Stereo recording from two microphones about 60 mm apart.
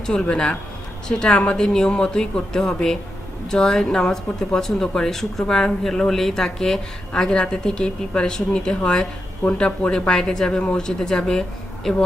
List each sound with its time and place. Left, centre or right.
0.0 s a woman's voice: centre